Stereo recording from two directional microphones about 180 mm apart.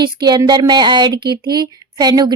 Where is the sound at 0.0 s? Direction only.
25° right (ahead or behind).